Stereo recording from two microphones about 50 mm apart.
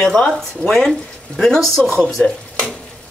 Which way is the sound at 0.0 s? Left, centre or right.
Centre.